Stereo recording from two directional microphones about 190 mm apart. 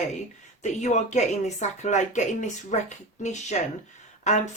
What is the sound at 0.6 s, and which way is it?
Speech, 40° left (ahead or behind).